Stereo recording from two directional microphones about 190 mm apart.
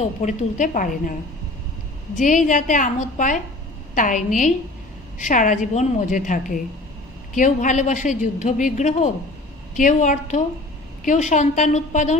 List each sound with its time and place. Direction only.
0.0 s a woman's voice: 40° left (ahead or behind)
2.1 s a woman's voice: 40° left (ahead or behind)